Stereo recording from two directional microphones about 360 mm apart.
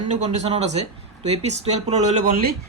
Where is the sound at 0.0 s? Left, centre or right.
Centre.